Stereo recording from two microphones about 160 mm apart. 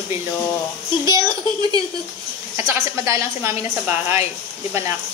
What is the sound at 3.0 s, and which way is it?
A woman's voice, 15° right (ahead or behind).